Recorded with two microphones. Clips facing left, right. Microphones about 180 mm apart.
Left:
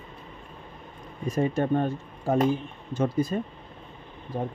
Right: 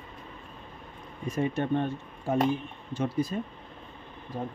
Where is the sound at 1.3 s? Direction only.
40° left (ahead or behind).